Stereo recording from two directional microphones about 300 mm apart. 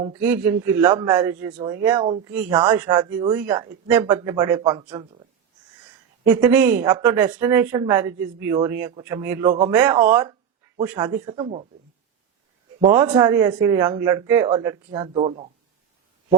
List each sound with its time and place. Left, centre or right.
0.0 s speech: centre
6.2 s speech: centre
12.8 s speech: centre